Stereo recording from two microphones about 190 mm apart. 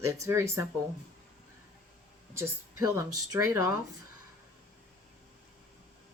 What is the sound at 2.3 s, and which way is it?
Speech, 15° right (ahead or behind).